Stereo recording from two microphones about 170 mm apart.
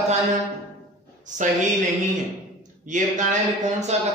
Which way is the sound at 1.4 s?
45° right (ahead or behind).